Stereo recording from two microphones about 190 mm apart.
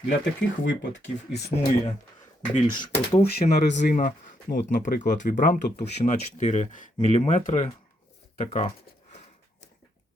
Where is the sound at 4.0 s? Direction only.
45° left (ahead or behind).